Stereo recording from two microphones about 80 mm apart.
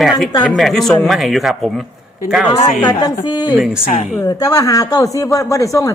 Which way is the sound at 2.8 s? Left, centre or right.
Left.